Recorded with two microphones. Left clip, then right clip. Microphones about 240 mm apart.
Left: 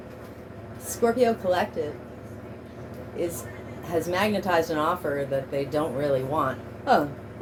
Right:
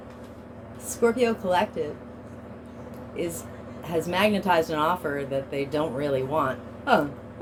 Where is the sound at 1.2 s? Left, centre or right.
Right.